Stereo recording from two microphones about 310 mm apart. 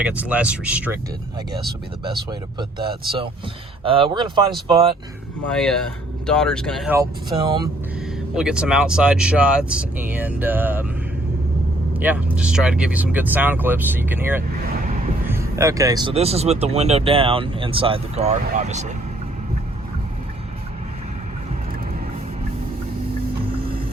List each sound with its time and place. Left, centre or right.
0.0 s speech: centre
3.8 s speech: centre
5.5 s speech: centre
8.4 s speech: centre
11.9 s speech: centre; by 18.9 s right